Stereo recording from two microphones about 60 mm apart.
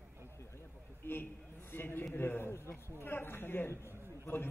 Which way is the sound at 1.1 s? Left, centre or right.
Left.